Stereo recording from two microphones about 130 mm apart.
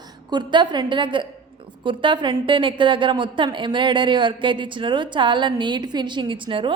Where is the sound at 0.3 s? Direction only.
35° right (ahead or behind).